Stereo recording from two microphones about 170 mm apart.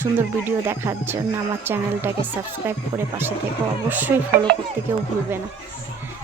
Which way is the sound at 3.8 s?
10° right (ahead or behind).